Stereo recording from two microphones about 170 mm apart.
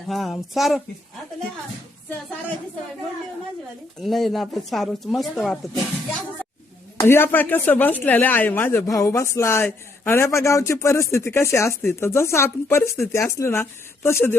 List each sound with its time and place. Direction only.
0.1 s speech: centre (ahead or behind)
4.0 s speech: centre (ahead or behind)
7.0 s speech: 15° left (ahead or behind)